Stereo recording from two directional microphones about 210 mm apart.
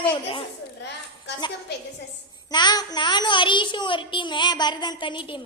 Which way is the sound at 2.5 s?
20° left (ahead or behind).